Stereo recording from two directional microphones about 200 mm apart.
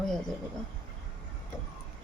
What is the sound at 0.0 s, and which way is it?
Speech, centre (ahead or behind).